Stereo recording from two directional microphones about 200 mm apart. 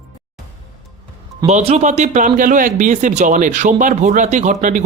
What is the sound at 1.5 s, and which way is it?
Speech, 35° right (ahead or behind).